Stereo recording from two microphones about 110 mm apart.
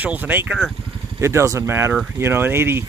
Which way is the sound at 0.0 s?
15° right (ahead or behind).